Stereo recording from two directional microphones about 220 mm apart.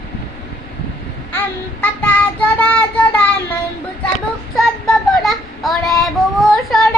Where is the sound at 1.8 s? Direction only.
5° left (ahead or behind).